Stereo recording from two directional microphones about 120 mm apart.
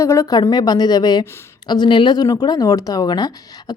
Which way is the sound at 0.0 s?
25° left (ahead or behind).